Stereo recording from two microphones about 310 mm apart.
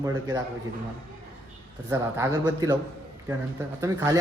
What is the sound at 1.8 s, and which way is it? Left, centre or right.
Speech, centre.